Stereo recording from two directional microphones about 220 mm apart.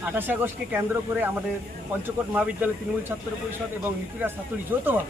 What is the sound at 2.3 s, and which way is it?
Speech, 5° right (ahead or behind).